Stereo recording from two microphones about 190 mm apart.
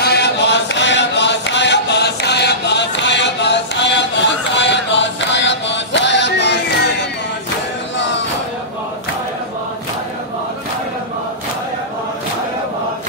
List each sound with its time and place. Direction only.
0.0 s chant: 60° left (ahead or behind)